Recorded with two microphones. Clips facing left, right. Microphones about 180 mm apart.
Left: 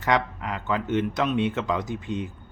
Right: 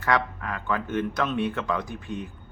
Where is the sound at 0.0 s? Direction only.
20° left (ahead or behind).